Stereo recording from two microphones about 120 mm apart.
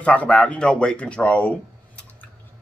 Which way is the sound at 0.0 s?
10° left (ahead or behind).